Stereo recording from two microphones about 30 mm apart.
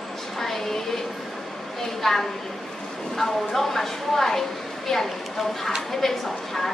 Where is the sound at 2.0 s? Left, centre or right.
Centre.